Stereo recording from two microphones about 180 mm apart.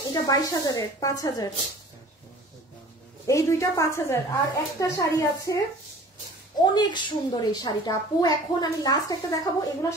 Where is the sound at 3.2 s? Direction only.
15° left (ahead or behind).